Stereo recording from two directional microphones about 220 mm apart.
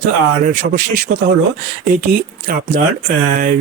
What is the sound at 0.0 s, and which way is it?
Speech, 40° right (ahead or behind).